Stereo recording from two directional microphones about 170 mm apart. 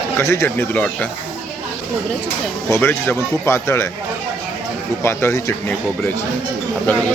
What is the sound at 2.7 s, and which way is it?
Speech, 15° left (ahead or behind).